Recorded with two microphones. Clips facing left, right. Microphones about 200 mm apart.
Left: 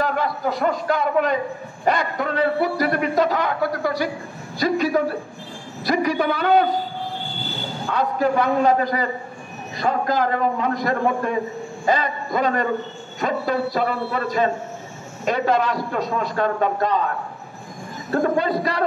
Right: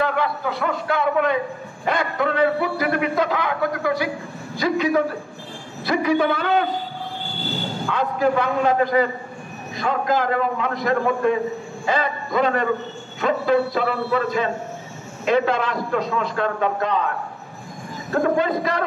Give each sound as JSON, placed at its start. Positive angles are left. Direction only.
{"t": 0.0, "sound": "a man's voice", "side_deg": 40}
{"t": 6.4, "sound": "a man's voice", "side_deg": 40}
{"t": 7.9, "sound": "a man's voice", "side_deg": 40}
{"t": 18.1, "sound": "a man's voice", "side_deg": 35}